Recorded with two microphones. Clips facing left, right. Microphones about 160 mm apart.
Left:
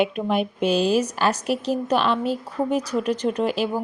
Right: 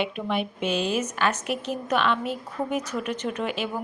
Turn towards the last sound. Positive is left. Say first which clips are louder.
# left 6 dB
turn(degrees=35)  # may be behind; listen again after turning